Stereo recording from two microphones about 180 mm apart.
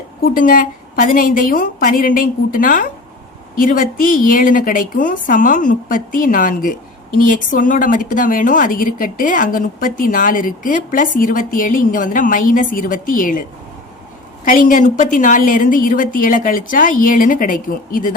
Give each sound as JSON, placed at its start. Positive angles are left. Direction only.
{"t": 0.2, "sound": "a woman's voice", "side_deg": 50}
{"t": 14.4, "sound": "a woman's voice", "side_deg": 50}